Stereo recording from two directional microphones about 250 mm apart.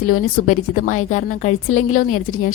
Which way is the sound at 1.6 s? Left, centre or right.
Left.